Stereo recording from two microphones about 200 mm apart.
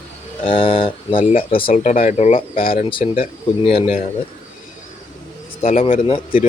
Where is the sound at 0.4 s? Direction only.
25° left (ahead or behind).